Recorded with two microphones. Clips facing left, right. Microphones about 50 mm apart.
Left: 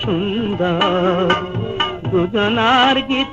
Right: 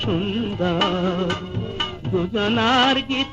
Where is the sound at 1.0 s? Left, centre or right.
Left.